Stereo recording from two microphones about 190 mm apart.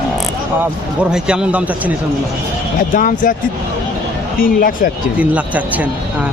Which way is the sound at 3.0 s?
45° left (ahead or behind).